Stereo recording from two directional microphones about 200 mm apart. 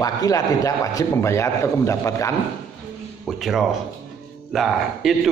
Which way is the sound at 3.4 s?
Centre (ahead or behind).